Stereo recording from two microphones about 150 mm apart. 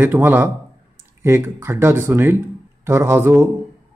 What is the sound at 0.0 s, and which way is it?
A man's voice, 15° right (ahead or behind).